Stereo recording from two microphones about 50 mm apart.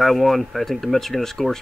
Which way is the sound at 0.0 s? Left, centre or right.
Centre.